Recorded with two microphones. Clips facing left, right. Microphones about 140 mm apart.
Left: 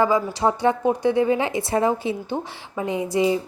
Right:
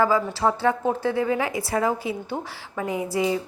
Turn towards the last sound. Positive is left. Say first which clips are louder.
# left 3 dB
turn(degrees=25)  # may be behind; listen again after turning